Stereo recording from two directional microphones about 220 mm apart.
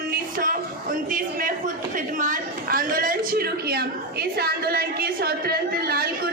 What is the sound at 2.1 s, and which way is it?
A woman's voice, 40° right (ahead or behind).